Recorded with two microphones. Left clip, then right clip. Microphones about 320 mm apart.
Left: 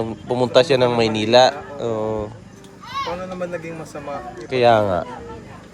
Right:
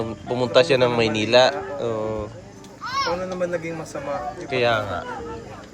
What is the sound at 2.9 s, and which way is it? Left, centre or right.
Children playing, centre.